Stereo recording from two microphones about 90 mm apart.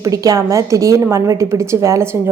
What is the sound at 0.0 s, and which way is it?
A woman's voice, 40° right (ahead or behind).